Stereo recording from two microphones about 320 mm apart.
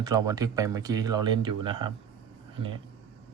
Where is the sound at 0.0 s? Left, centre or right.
Centre.